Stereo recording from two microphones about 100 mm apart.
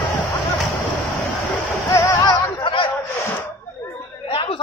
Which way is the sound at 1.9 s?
35° left (ahead or behind).